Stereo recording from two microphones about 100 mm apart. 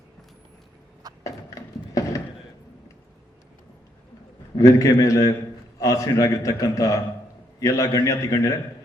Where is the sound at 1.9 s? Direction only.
35° left (ahead or behind).